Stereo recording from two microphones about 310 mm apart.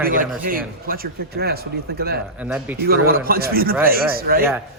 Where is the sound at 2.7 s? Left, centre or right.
Right.